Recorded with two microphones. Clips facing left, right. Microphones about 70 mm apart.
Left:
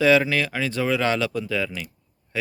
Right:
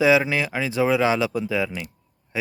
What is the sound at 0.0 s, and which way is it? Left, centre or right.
Speech, centre.